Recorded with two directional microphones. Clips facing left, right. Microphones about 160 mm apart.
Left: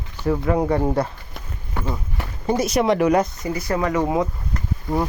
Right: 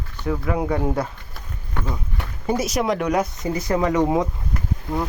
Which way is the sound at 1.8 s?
10° left (ahead or behind).